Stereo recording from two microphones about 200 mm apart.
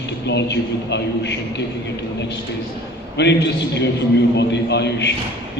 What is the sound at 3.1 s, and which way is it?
A man's voice, 60° left (ahead or behind).